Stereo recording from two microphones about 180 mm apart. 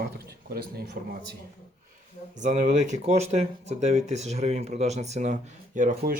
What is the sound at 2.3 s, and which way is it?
Speech, 45° right (ahead or behind).